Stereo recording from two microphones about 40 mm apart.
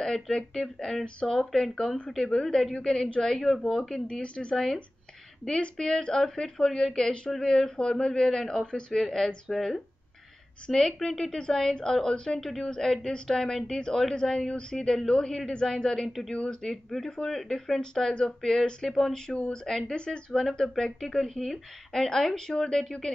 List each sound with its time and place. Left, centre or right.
0.0 s speech: centre
4.1 s speech: left; by 16.1 s centre
16.1 s speech: centre
16.6 s speech: centre
19.4 s speech: centre